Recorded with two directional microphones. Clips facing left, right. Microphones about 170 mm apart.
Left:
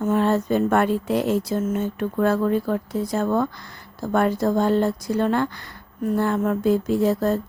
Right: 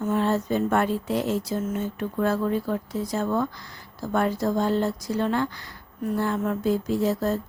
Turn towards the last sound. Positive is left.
turn(degrees=55)  # may be behind; listen again after turning